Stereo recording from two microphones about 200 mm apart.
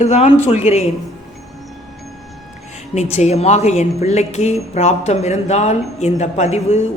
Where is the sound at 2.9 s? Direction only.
35° left (ahead or behind).